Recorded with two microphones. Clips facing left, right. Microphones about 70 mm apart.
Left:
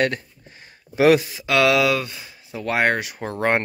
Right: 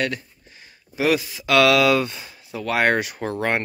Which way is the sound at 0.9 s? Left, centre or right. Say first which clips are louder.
Left 5 dB; left.